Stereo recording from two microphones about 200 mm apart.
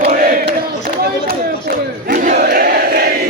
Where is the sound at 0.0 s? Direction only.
50° right (ahead or behind).